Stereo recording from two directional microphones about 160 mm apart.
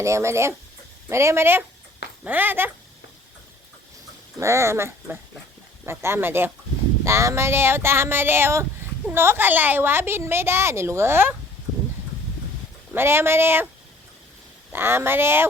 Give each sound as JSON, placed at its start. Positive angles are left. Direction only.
{"t": 0.0, "sound": "a woman's voice", "side_deg": -15}
{"t": 4.4, "sound": "a woman's voice", "side_deg": -15}
{"t": 12.9, "sound": "a woman's voice", "side_deg": -15}
{"t": 14.7, "sound": "a woman's voice", "side_deg": -15}